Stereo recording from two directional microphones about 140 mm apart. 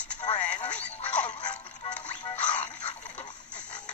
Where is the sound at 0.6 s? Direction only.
10° left (ahead or behind).